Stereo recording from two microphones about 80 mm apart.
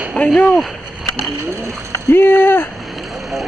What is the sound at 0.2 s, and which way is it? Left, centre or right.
Speech, left.